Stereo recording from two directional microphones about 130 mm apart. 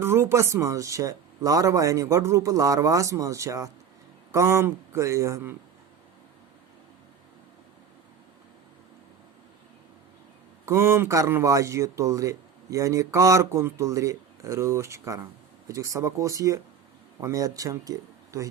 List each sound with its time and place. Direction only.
0.0 s speech: 20° right (ahead or behind)
10.7 s speech: 20° right (ahead or behind)